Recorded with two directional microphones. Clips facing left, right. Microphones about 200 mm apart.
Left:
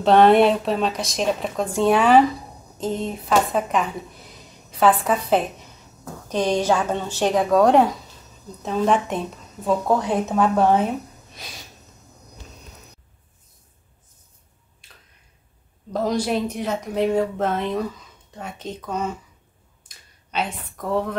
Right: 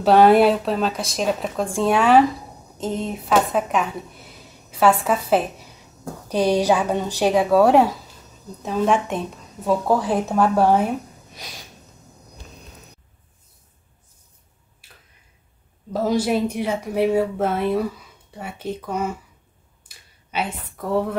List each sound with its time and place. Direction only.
0.0 s a woman's voice: 5° right (ahead or behind)
14.8 s finger snapping: 5° right (ahead or behind)
15.9 s speech: 5° right (ahead or behind)